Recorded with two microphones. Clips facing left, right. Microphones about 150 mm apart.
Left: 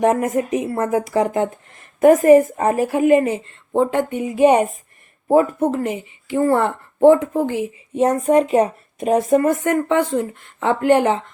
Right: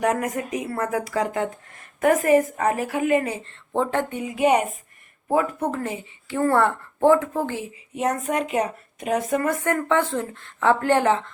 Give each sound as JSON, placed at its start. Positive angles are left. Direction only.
{"t": 0.0, "sound": "a woman's voice", "side_deg": 25}
{"t": 3.4, "sound": "a woman's voice", "side_deg": 15}
{"t": 4.2, "sound": "a woman's voice", "side_deg": 30}
{"t": 7.9, "sound": "a woman's voice", "side_deg": 25}